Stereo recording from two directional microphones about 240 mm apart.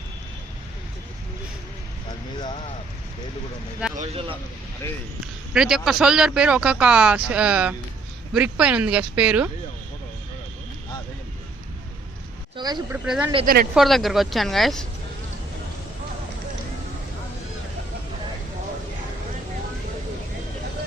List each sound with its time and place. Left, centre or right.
3.9 s speech: right
5.5 s speech: centre
12.5 s speech: centre
12.9 s speech: centre
13.4 s speech: right
13.7 s speech: centre